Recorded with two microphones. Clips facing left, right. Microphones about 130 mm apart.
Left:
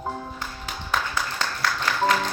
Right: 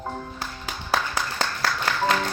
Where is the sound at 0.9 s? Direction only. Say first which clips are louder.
Right 1 dB; 35° right (ahead or behind).